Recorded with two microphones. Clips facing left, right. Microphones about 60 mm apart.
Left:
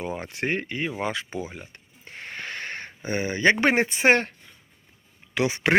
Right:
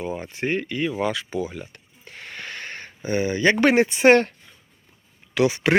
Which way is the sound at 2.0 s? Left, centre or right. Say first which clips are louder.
Left 1 dB; left.